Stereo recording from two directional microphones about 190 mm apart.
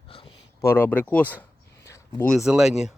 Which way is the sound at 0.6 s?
10° left (ahead or behind).